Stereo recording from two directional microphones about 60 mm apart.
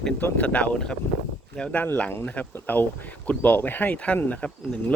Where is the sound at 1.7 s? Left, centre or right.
Left.